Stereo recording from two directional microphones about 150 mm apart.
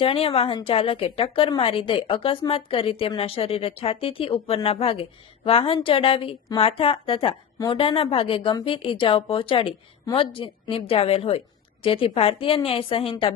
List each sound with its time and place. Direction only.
0.0 s a woman's voice: 40° left (ahead or behind)